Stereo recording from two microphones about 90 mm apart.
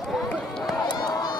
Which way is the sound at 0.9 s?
50° left (ahead or behind).